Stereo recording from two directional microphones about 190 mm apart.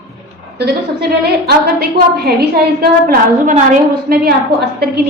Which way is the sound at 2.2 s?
55° right (ahead or behind).